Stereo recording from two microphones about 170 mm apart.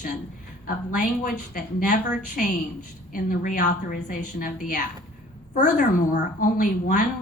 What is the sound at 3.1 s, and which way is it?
A woman's voice, 55° left (ahead or behind).